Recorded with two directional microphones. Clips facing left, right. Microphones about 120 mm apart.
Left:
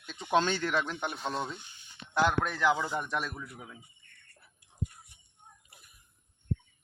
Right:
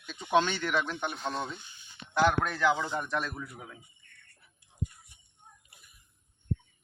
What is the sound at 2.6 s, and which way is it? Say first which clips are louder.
Speech: even; 10° left (ahead or behind).